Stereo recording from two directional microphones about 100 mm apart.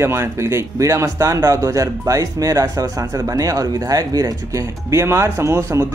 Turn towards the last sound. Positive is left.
turn(degrees=-25)  # may be behind; listen again after turning